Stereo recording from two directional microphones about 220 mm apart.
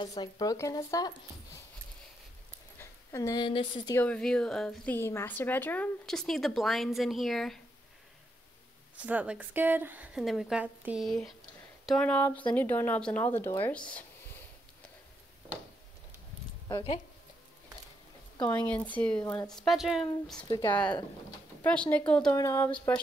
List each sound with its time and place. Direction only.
0.0 s speech: 20° left (ahead or behind)
2.8 s a woman's voice: 15° left (ahead or behind)
4.0 s a woman's voice: 5° left (ahead or behind)
9.0 s a woman's voice: 5° right (ahead or behind)
16.6 s speech: 25° left (ahead or behind)
18.4 s a woman's voice: 5° left (ahead or behind)
20.4 s speech: 20° left (ahead or behind)
21.6 s a woman's voice: 5° left (ahead or behind)